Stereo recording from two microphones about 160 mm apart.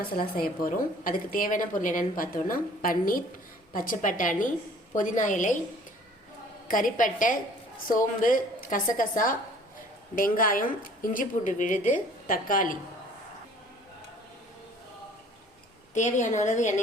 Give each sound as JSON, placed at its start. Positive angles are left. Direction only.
{"t": 0.3, "sound": "a woman's voice", "side_deg": 65}
{"t": 6.7, "sound": "a woman's voice", "side_deg": 60}
{"t": 16.0, "sound": "a woman's voice", "side_deg": 50}